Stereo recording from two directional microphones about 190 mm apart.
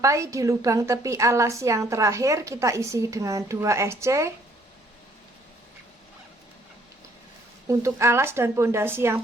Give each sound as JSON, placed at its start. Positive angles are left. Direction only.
{"t": 0.0, "sound": "a woman's voice", "side_deg": -15}
{"t": 7.7, "sound": "a woman's voice", "side_deg": -15}